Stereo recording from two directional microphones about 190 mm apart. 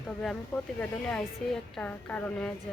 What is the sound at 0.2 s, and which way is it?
Speech, 5° left (ahead or behind).